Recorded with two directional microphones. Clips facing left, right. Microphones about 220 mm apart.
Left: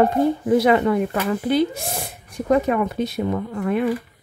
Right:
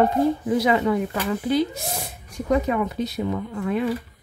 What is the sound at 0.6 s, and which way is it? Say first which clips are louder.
Speech: left 1 dB; 55° left (ahead or behind).